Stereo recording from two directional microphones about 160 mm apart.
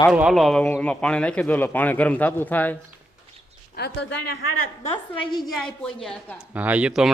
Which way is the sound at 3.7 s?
90° left.